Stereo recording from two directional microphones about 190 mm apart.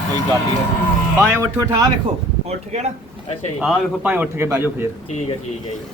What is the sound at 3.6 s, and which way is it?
Speech, 5° right (ahead or behind).